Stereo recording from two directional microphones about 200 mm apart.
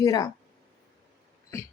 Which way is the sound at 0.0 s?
20° left (ahead or behind).